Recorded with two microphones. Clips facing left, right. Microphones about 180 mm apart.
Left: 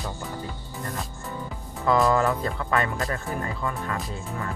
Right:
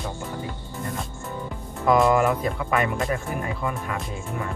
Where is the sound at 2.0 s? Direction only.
15° right (ahead or behind).